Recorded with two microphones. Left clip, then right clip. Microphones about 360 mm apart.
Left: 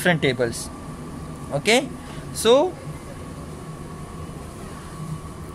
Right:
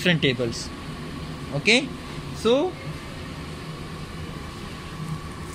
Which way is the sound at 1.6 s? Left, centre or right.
Left.